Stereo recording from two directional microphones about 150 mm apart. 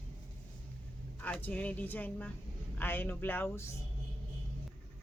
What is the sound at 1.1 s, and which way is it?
Speech, 10° left (ahead or behind).